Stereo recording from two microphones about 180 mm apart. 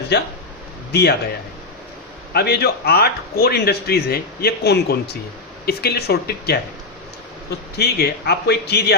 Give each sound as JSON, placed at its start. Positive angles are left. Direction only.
{"t": 0.1, "sound": "a man's voice", "side_deg": 65}
{"t": 2.3, "sound": "a man's voice", "side_deg": 60}
{"t": 7.8, "sound": "a man's voice", "side_deg": 65}